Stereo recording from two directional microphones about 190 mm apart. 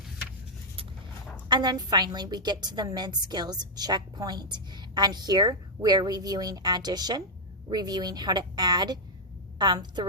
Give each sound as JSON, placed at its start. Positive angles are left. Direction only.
{"t": 1.5, "sound": "a woman's voice", "side_deg": -20}